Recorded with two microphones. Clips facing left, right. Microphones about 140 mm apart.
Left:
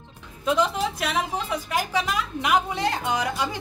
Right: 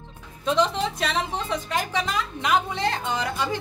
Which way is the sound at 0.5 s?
5° left (ahead or behind).